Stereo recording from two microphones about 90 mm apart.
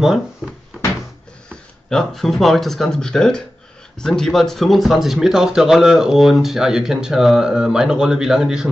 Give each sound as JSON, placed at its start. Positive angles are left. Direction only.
{"t": 1.5, "sound": "speech", "side_deg": 5}